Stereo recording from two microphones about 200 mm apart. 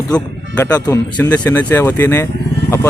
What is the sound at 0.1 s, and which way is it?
Speech, 10° left (ahead or behind).